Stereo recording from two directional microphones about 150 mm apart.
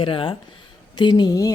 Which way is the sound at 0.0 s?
35° left (ahead or behind).